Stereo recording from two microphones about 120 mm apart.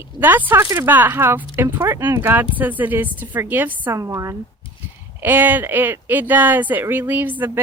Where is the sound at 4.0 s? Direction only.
25° right (ahead or behind).